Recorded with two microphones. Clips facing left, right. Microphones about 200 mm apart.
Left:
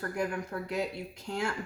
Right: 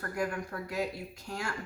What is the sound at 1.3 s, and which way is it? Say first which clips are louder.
Speech: left 5 dB; 25° left (ahead or behind).